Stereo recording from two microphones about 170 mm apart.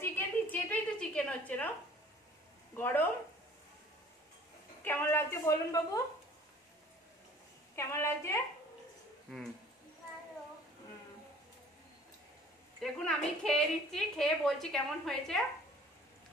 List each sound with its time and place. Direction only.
0.0 s a sound: 10° left (ahead or behind)
2.7 s a woman's voice: 10° left (ahead or behind)
4.8 s a woman's voice: 10° left (ahead or behind)
7.7 s a woman's voice: 15° left (ahead or behind)
12.8 s a woman's voice: 5° left (ahead or behind)